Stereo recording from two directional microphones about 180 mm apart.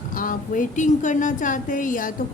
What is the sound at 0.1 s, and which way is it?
A woman's voice, 50° left (ahead or behind).